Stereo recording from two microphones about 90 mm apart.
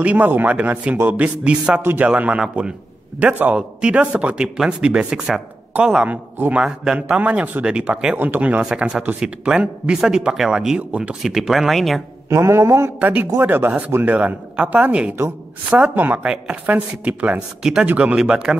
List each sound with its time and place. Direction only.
0.0 s a man's voice: 15° right (ahead or behind)
1.8 s speech: 25° right (ahead or behind)
2.0 s a man's voice: 15° right (ahead or behind)
6.6 s a man's voice: 5° right (ahead or behind)
12.3 s music: 30° right (ahead or behind)
13.0 s a man's voice: 15° right (ahead or behind)